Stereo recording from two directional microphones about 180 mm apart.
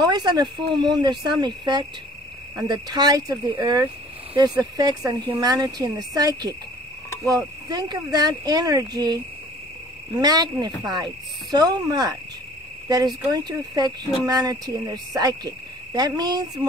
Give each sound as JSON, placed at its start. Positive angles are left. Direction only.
{"t": 0.0, "sound": "speech", "side_deg": -25}